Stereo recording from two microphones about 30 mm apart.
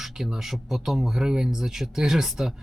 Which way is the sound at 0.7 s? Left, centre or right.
Centre.